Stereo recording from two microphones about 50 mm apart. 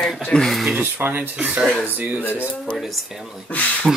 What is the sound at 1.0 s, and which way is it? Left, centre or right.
Speech, right.